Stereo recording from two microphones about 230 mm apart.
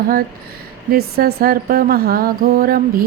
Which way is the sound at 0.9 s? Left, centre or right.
Right.